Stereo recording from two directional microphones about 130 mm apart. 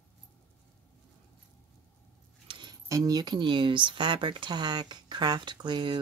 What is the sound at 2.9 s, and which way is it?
Speech, 30° right (ahead or behind).